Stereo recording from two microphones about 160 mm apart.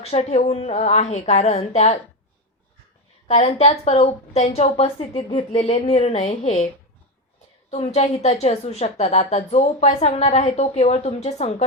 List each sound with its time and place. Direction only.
0.0 s a woman's voice: 45° left (ahead or behind)
3.2 s a woman's voice: 40° left (ahead or behind)
7.7 s a woman's voice: 40° left (ahead or behind)